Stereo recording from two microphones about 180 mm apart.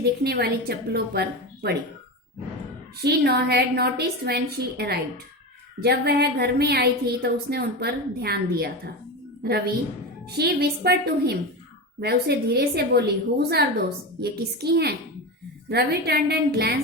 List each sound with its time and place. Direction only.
0.0 s a woman's voice: 65° right (ahead or behind)
3.0 s a woman's voice: 60° right (ahead or behind)